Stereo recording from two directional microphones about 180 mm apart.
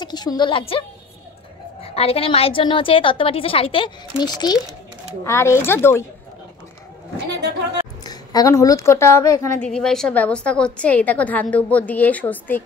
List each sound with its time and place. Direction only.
0.0 s a woman's voice: 25° left (ahead or behind)
8.0 s a woman's voice: 20° left (ahead or behind)
9.6 s a woman's voice: 5° left (ahead or behind)